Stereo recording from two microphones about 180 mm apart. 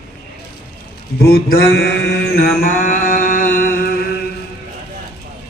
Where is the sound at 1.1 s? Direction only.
60° left (ahead or behind).